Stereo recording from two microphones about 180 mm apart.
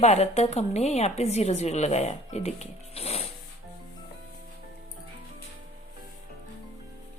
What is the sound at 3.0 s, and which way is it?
Music, 35° left (ahead or behind).